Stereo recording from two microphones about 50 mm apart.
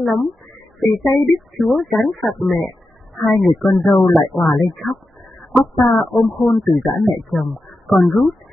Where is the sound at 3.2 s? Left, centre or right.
Centre.